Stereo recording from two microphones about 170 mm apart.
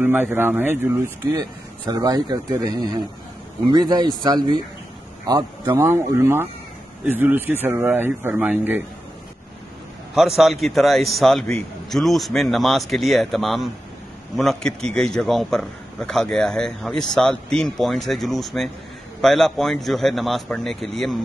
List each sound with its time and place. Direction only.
0.0 s a man's voice: 10° right (ahead or behind)
10.1 s a man's voice: centre (ahead or behind)